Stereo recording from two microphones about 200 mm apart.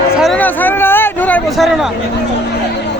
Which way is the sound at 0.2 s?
5° left (ahead or behind).